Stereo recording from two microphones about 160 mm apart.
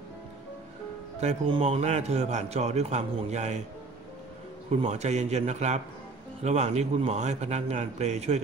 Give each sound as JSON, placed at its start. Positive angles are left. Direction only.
{"t": 1.2, "sound": "a man's voice", "side_deg": -40}
{"t": 4.6, "sound": "a man's voice", "side_deg": -45}